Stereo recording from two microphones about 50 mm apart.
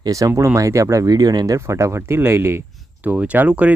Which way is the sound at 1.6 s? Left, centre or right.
Right.